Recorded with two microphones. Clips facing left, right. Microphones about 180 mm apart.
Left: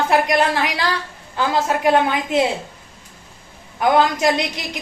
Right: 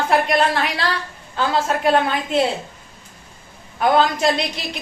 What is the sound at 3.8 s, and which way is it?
Speech, 15° left (ahead or behind).